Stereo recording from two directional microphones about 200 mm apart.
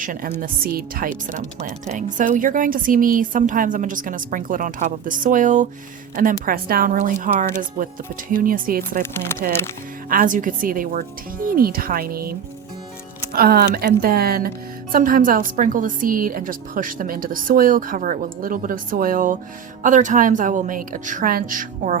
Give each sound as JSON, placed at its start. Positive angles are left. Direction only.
{"t": 0.0, "sound": "speech", "side_deg": -45}
{"t": 9.1, "sound": "speech", "side_deg": 10}
{"t": 10.1, "sound": "speech", "side_deg": -45}
{"t": 13.3, "sound": "a woman's voice", "side_deg": -50}